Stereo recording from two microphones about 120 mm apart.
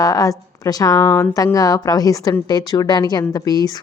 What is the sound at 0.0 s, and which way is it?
A woman's voice, 30° left (ahead or behind).